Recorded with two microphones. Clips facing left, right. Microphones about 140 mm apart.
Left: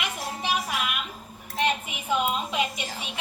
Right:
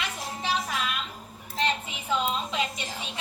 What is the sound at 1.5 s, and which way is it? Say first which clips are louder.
Speech: left 2 dB; 15° left (ahead or behind).